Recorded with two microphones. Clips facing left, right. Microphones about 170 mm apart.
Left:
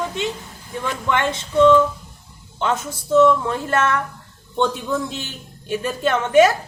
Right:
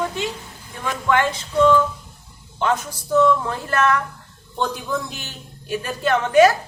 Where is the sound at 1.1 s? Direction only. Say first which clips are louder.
Right 2 dB; 25° left (ahead or behind).